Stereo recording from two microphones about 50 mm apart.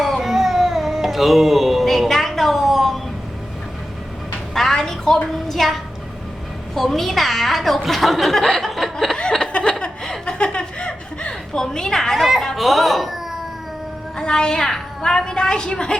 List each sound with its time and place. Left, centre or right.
0.0 s music: centre
4.5 s a sound: centre
6.7 s a woman's voice: centre
9.5 s chuckle: left
10.3 s a woman's voice: left; by 13.1 s centre
14.2 s a woman's voice: centre